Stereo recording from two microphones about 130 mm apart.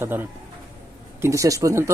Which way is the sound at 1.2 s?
25° right (ahead or behind).